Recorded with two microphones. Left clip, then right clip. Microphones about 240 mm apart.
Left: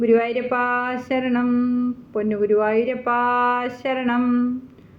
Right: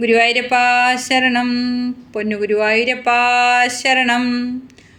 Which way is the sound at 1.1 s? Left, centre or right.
Right.